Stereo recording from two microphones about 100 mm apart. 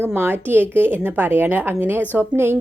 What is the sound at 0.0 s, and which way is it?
A woman's voice, 20° right (ahead or behind).